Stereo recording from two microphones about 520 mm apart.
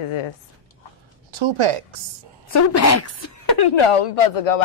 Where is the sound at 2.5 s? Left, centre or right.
Left.